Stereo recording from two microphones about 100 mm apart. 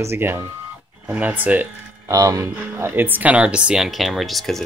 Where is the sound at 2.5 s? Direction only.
20° right (ahead or behind).